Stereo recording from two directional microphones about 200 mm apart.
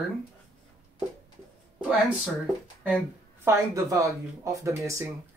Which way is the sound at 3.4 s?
15° right (ahead or behind).